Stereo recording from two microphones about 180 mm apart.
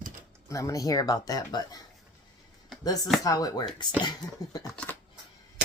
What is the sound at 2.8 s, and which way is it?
Speech, 20° left (ahead or behind).